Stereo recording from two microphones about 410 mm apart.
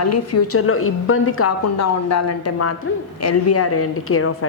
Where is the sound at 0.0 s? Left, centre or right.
Left.